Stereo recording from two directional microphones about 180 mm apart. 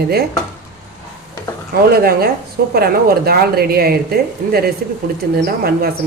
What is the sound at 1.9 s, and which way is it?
Speech, 55° right (ahead or behind).